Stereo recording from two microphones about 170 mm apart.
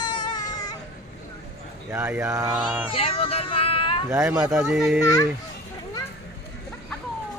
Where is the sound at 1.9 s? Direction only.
15° right (ahead or behind).